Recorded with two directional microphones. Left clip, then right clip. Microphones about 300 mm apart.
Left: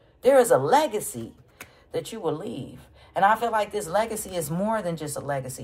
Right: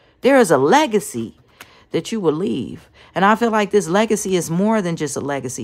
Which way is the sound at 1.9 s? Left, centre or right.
Right.